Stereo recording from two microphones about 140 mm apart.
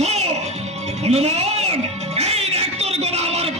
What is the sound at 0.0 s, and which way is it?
Music, 50° right (ahead or behind).